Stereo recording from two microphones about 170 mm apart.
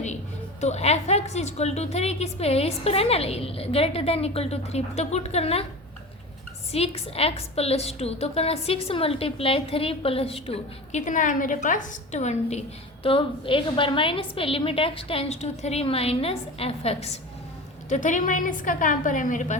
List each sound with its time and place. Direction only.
0.6 s a woman's voice: 40° left (ahead or behind)
6.7 s a woman's voice: 35° left (ahead or behind)